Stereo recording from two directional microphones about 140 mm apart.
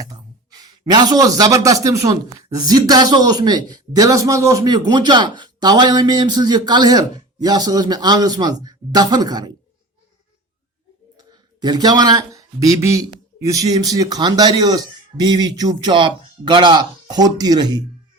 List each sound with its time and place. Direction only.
0.0 s a man's voice: 25° right (ahead or behind)
11.2 s speech: 30° right (ahead or behind)